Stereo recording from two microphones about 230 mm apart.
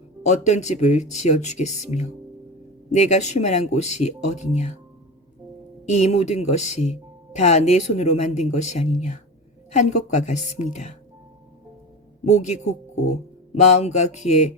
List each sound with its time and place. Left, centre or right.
0.2 s speech: left
5.9 s a woman's voice: left
12.2 s speech: left